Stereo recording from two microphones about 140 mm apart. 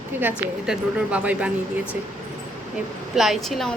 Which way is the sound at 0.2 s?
10° right (ahead or behind).